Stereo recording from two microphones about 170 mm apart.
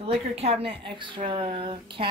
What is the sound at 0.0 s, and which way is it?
Speech, 35° right (ahead or behind).